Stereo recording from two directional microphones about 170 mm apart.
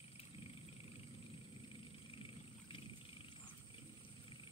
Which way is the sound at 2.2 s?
30° left (ahead or behind).